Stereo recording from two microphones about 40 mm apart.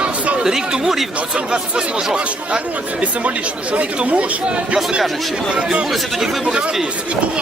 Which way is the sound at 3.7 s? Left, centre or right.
Right.